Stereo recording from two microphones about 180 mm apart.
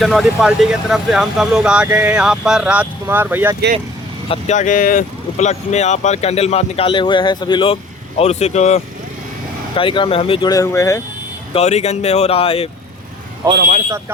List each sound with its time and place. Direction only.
0.0 s speech: centre (ahead or behind)
4.3 s speech: 40° left (ahead or behind)
9.7 s speech: 30° left (ahead or behind)
11.5 s speech: 35° left (ahead or behind)
13.5 s speech: 60° right (ahead or behind)